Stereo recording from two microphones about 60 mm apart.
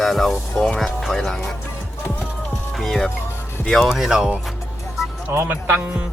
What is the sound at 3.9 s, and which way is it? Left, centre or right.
Speech, centre.